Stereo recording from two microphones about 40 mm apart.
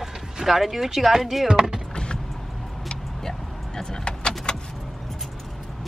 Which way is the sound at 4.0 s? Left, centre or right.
Left.